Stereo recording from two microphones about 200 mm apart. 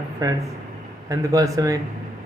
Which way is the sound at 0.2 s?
20° right (ahead or behind).